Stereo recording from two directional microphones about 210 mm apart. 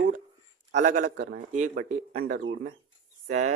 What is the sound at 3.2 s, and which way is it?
Speech, 35° right (ahead or behind).